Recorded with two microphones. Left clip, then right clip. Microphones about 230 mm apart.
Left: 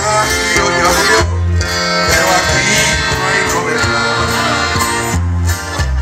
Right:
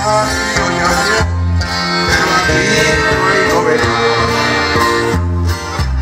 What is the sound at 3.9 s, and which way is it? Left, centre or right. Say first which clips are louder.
Music: right 1 dB; left.